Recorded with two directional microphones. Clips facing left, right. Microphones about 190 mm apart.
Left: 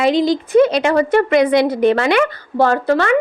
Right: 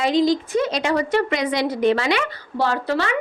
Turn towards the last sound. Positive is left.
turn(degrees=50)  # may be behind; listen again after turning